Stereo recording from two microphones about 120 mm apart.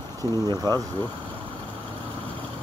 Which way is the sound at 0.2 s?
30° right (ahead or behind).